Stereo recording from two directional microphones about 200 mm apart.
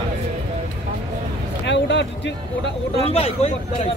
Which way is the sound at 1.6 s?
60° left (ahead or behind).